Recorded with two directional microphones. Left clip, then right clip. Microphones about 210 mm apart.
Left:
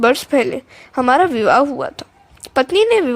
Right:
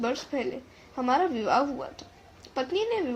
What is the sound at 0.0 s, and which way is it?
A woman's voice, 50° left (ahead or behind).